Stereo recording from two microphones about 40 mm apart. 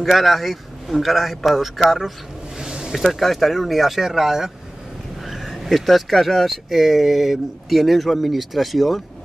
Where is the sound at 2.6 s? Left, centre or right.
Centre.